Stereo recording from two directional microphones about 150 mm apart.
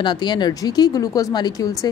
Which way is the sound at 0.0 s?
30° left (ahead or behind).